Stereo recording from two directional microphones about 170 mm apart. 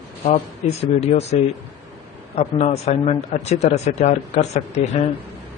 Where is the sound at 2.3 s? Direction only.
40° left (ahead or behind).